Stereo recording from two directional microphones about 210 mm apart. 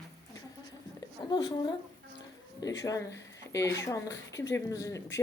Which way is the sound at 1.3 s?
20° left (ahead or behind).